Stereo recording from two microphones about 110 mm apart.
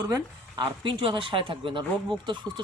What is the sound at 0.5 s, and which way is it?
Speech, 45° right (ahead or behind).